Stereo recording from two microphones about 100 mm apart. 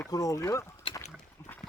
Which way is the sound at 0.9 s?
60° left (ahead or behind).